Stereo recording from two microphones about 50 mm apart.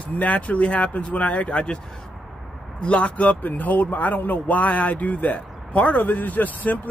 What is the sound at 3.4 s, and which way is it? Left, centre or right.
Speech, left.